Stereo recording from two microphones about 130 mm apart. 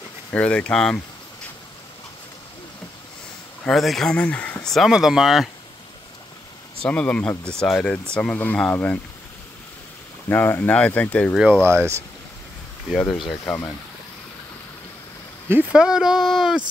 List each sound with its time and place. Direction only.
0.3 s speech: 10° left (ahead or behind)
3.6 s speech: centre (ahead or behind)
6.8 s speech: 10° left (ahead or behind)
10.2 s speech: 15° left (ahead or behind)
11.6 s speech: 20° right (ahead or behind)
13.1 s speech: centre (ahead or behind)
15.7 s speech: 5° right (ahead or behind)